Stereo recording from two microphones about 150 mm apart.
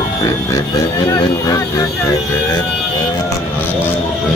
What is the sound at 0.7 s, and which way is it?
Speech, 25° left (ahead or behind).